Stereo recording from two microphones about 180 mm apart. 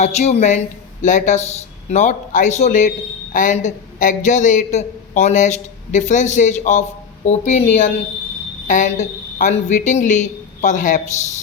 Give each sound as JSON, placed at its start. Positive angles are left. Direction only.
{"t": 0.0, "sound": "a man's voice", "side_deg": 40}